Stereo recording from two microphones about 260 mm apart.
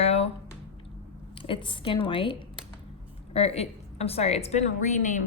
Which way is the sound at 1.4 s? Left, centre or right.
Centre.